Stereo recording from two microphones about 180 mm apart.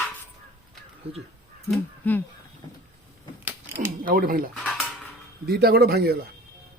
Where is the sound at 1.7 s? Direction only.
10° left (ahead or behind).